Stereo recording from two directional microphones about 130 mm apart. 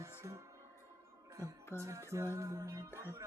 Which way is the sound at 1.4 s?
20° right (ahead or behind).